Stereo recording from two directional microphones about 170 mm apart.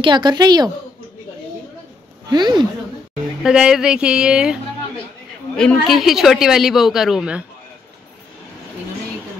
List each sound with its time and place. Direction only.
0.0 s a woman's voice: 25° right (ahead or behind)
2.3 s a woman's voice: 25° right (ahead or behind)
3.4 s a woman's voice: 5° right (ahead or behind)
5.6 s a woman's voice: centre (ahead or behind)